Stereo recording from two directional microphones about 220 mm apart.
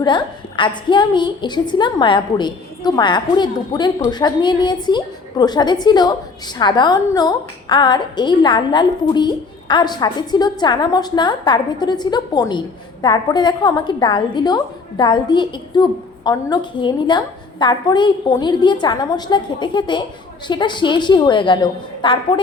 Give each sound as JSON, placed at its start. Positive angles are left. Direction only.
{"t": 0.0, "sound": "a woman's voice", "side_deg": 20}